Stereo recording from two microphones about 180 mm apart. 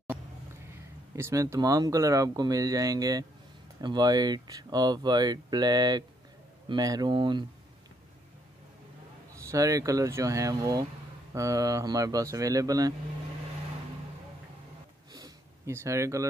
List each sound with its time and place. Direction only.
1.1 s speech: 15° right (ahead or behind)
9.5 s speech: 15° right (ahead or behind)
15.2 s a sound: 15° right (ahead or behind)